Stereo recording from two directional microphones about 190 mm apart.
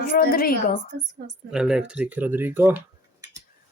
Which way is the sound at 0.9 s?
55° right (ahead or behind).